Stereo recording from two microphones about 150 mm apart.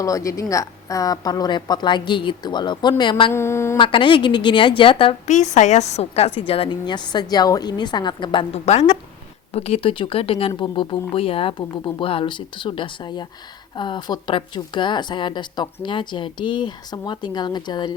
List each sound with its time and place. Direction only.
0.0 s a woman's voice: 20° left (ahead or behind)
3.3 s speech: 15° left (ahead or behind)
3.8 s a woman's voice: 35° left (ahead or behind)
5.2 s a woman's voice: 50° left (ahead or behind); by 17.9 s 30° left (ahead or behind)